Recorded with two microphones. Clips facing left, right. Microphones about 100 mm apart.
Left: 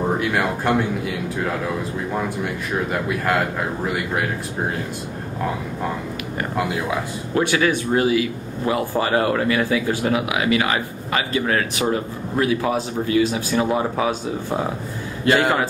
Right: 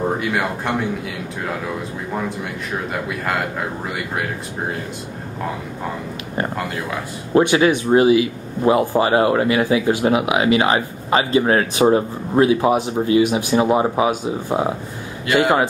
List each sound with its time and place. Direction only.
0.2 s speech: centre (ahead or behind)
2.9 s speech: centre (ahead or behind)
6.5 s speech: 10° left (ahead or behind)
7.3 s speech: 25° right (ahead or behind)